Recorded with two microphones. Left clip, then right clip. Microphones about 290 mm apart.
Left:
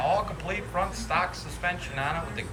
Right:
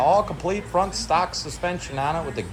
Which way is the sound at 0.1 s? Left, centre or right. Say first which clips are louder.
Right 7 dB; centre.